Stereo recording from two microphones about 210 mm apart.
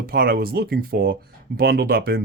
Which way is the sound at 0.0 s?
45° right (ahead or behind).